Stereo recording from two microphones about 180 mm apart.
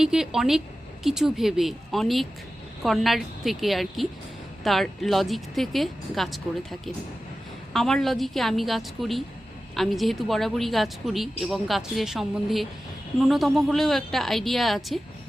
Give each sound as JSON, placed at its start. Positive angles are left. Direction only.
{"t": 0.0, "sound": "a woman's voice", "side_deg": -5}